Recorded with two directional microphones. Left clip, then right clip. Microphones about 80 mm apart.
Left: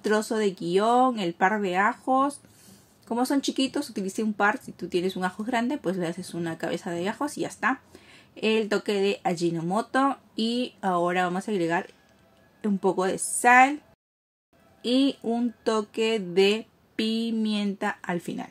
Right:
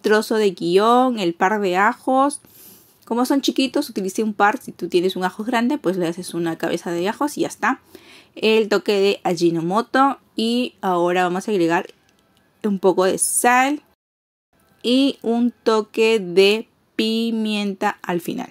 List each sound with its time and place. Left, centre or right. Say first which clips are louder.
0.0 s speech: right 8 dB; right
14.8 s a woman's voice: right 6 dB; right
15.2 s speech: right 8 dB; centre; by 18.5 s right